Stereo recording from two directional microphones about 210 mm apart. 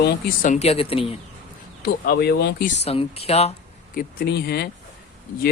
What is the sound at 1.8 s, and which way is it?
Speech, 45° left (ahead or behind).